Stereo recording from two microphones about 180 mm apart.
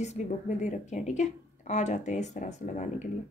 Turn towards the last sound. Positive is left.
turn(degrees=40)  # may be behind; listen again after turning